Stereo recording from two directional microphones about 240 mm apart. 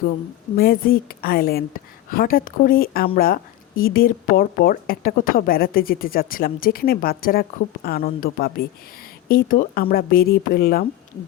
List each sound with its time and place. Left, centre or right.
0.5 s a woman's voice: left